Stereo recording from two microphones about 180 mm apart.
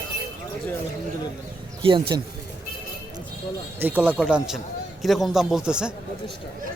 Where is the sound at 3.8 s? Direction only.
10° right (ahead or behind).